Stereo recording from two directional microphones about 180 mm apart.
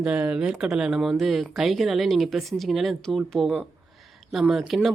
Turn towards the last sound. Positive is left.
turn(degrees=0)  # may be behind; listen again after turning